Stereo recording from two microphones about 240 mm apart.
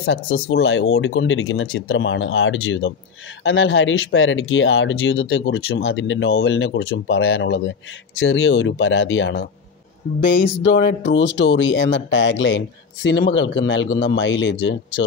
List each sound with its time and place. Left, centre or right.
0.0 s speech: left